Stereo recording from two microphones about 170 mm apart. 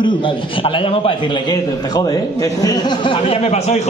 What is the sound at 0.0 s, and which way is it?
A man's voice, 30° left (ahead or behind).